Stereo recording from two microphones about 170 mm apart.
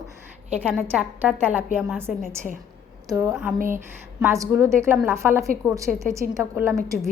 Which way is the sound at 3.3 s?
5° right (ahead or behind).